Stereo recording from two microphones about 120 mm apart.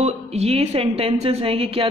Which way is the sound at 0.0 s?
60° right (ahead or behind).